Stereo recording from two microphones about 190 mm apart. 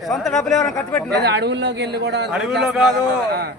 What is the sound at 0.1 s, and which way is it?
Speech, centre (ahead or behind).